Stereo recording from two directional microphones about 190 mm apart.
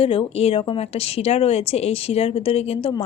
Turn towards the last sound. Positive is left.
turn(degrees=30)  # may be behind; listen again after turning